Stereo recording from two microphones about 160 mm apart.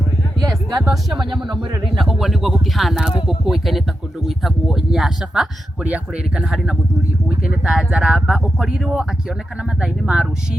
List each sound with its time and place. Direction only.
0.4 s music: 20° right (ahead or behind)
2.0 s speech: centre (ahead or behind)